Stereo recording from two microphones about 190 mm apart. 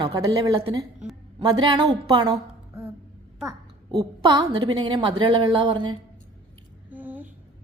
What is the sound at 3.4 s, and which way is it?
A woman's voice, 20° right (ahead or behind).